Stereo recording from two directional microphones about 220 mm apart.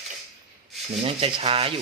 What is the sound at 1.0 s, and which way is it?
Speech, 25° right (ahead or behind).